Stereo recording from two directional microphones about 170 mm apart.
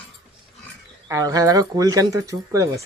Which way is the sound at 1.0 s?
20° right (ahead or behind).